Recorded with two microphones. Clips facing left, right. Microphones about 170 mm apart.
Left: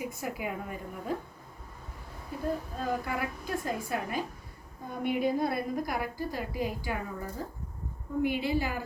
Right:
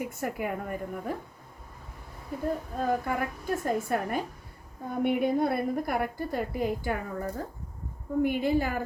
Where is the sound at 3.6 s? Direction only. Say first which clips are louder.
Right 7 dB; 55° right (ahead or behind).